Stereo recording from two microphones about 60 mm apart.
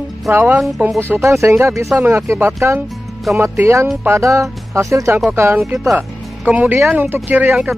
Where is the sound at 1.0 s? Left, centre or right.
Right.